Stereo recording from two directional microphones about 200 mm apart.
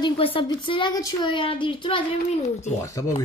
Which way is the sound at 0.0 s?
25° left (ahead or behind).